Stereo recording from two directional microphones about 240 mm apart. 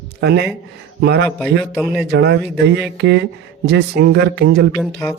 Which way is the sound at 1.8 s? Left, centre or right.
Centre.